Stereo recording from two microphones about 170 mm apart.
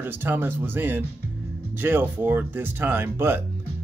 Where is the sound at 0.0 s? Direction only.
10° right (ahead or behind).